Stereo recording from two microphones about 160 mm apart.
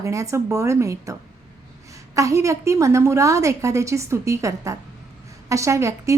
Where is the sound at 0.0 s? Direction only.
20° right (ahead or behind).